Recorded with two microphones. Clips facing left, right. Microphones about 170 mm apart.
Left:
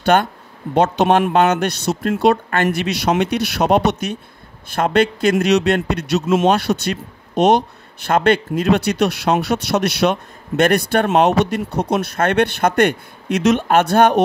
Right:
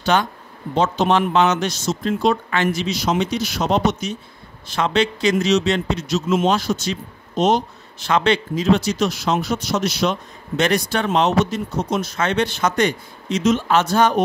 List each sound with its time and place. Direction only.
0.0 s a man's voice: 55° left (ahead or behind)